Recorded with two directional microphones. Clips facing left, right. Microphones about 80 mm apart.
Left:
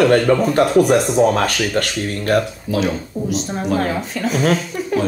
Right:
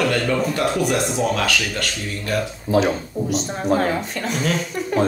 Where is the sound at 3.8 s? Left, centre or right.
Centre.